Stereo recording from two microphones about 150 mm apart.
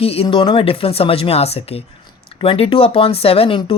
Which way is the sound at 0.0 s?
40° left (ahead or behind).